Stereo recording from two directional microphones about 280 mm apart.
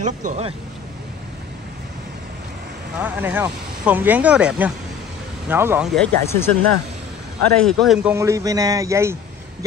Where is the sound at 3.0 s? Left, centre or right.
Centre.